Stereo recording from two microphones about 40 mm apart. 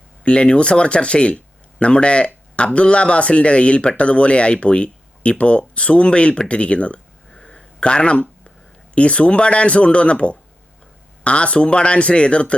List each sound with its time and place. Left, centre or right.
0.3 s speech: left
7.3 s a sound: centre
7.8 s speech: left